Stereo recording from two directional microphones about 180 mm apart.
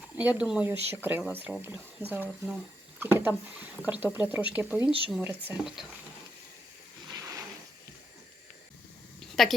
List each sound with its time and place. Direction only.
0.2 s speech: 10° right (ahead or behind)
7.1 s a sound: 20° right (ahead or behind)
9.4 s speech: centre (ahead or behind)